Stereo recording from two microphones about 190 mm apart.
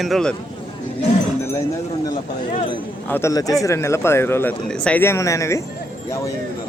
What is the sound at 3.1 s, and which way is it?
Speech, 15° left (ahead or behind).